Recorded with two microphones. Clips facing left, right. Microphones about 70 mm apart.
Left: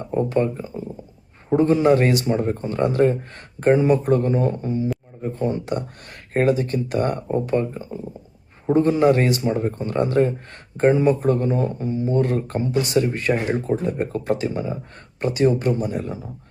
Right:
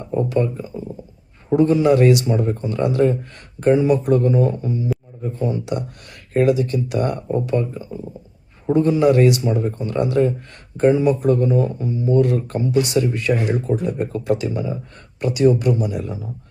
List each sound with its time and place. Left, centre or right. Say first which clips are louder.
0.1 s speech: right 1 dB; left